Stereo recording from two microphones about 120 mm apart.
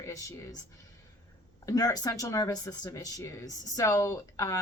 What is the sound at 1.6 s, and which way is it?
Speech, 30° left (ahead or behind).